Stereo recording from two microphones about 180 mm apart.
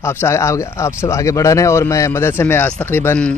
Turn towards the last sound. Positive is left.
turn(degrees=10)  # may be behind; listen again after turning